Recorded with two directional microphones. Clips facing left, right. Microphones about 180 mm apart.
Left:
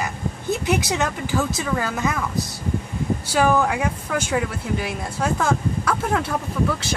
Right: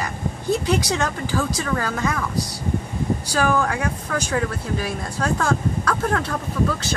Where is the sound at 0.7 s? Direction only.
20° left (ahead or behind).